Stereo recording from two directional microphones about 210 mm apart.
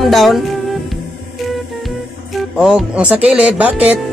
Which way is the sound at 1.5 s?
Centre (ahead or behind).